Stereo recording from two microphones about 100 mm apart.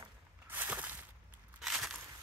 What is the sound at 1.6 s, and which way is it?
Crushing, 5° right (ahead or behind).